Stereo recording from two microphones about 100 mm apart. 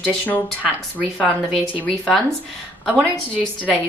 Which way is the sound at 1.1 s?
10° left (ahead or behind).